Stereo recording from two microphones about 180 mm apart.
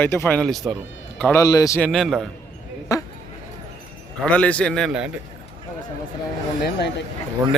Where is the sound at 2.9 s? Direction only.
20° left (ahead or behind).